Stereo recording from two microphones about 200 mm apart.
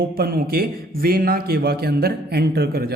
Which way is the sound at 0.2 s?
50° right (ahead or behind).